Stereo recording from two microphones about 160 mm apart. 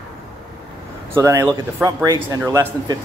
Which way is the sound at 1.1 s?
20° right (ahead or behind).